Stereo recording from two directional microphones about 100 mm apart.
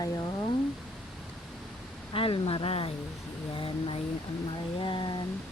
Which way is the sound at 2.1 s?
65° left (ahead or behind).